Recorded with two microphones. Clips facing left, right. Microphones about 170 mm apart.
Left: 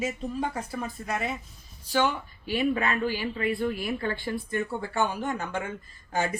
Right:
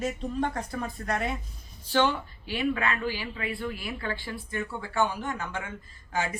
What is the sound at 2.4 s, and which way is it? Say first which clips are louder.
Speech: left 2 dB; 45° left (ahead or behind).